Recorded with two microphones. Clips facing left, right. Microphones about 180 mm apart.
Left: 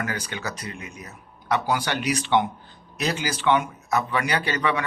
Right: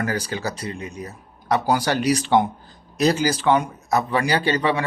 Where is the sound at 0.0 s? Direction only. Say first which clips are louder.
Right 5 dB; 35° right (ahead or behind).